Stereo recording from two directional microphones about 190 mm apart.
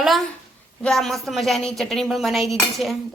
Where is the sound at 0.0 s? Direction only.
Centre (ahead or behind).